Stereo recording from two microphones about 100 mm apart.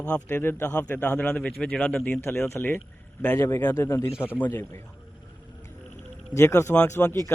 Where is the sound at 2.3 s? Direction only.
25° left (ahead or behind).